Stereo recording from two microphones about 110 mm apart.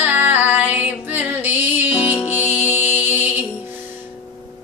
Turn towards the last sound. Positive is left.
turn(degrees=-15)  # may be behind; listen again after turning